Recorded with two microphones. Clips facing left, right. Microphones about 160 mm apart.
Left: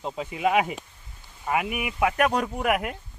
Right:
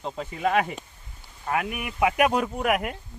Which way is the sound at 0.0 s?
10° left (ahead or behind).